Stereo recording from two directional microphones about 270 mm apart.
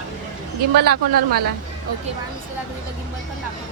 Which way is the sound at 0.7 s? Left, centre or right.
Right.